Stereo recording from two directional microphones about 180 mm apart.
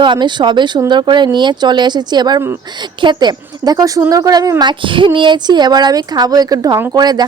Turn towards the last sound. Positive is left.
turn(degrees=-20)  # may be behind; listen again after turning